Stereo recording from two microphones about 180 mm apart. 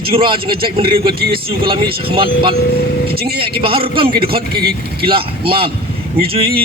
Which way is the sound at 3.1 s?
60° right (ahead or behind).